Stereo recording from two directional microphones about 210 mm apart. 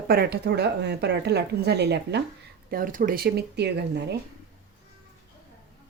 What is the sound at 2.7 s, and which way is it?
Speech, 40° right (ahead or behind).